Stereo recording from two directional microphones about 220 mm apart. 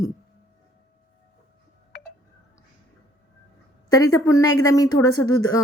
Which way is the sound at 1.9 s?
45° left (ahead or behind).